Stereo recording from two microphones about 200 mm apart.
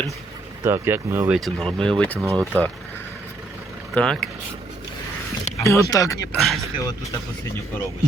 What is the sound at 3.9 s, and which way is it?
Speech, 5° left (ahead or behind).